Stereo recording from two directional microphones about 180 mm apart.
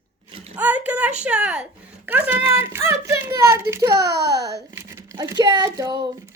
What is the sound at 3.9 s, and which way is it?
Speech, 65° right (ahead or behind).